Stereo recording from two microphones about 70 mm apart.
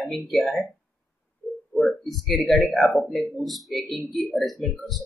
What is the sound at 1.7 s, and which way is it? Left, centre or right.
Speech, centre.